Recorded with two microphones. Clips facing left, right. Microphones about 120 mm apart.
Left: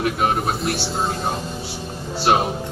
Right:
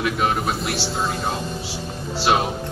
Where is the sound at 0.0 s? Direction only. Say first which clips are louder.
Left 1 dB; 45° left (ahead or behind).